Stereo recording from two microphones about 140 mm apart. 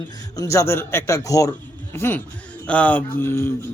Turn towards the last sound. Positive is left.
turn(degrees=15)  # may be behind; listen again after turning